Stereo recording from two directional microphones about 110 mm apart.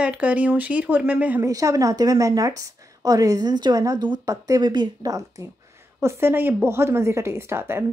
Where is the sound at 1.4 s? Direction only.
30° right (ahead or behind).